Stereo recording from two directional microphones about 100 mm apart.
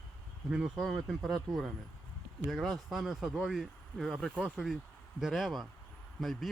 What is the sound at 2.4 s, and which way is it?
Speech, centre (ahead or behind).